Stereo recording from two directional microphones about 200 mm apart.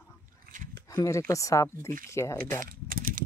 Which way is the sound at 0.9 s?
15° left (ahead or behind).